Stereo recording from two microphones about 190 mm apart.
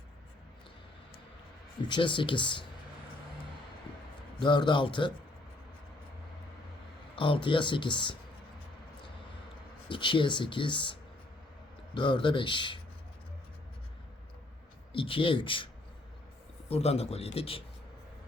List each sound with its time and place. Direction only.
1.9 s speech: 25° left (ahead or behind)
4.4 s speech: 25° left (ahead or behind)
7.2 s speech: 25° left (ahead or behind)
9.9 s speech: 25° left (ahead or behind)
11.9 s speech: 25° left (ahead or behind)
14.9 s a man's voice: 25° left (ahead or behind)